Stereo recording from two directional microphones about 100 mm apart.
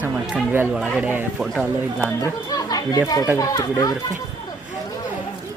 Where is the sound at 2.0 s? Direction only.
30° left (ahead or behind).